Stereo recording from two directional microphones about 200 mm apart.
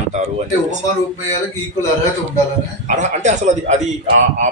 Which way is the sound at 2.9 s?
35° right (ahead or behind).